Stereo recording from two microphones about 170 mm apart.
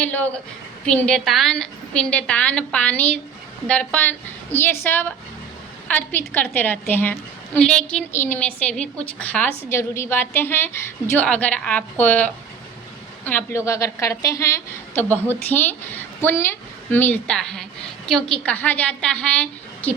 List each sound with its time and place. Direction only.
0.0 s a woman's voice: 10° left (ahead or behind)